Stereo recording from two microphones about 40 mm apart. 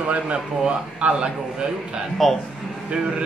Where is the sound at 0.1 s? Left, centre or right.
Right.